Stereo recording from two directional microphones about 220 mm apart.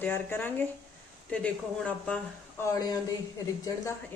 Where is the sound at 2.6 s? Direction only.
15° left (ahead or behind).